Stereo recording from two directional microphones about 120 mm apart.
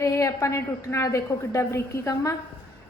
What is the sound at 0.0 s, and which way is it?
A woman's voice, 25° left (ahead or behind).